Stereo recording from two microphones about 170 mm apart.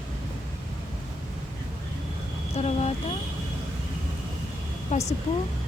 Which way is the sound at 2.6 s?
40° left (ahead or behind).